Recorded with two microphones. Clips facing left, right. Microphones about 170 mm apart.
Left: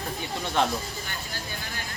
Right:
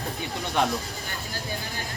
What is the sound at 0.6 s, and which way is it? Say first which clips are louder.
Speech: even; centre (ahead or behind).